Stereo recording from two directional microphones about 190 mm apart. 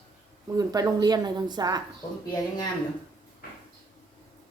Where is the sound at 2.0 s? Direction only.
20° left (ahead or behind).